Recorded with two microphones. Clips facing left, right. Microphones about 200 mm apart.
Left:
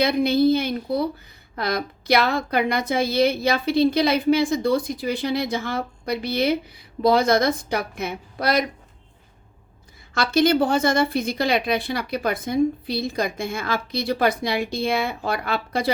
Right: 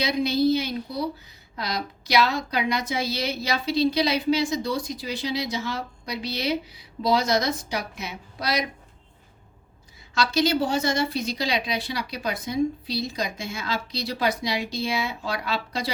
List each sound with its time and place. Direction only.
0.0 s a woman's voice: 55° left (ahead or behind)
10.2 s a woman's voice: 55° left (ahead or behind)